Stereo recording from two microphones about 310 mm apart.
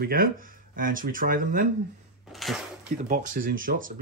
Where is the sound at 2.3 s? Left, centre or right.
Centre.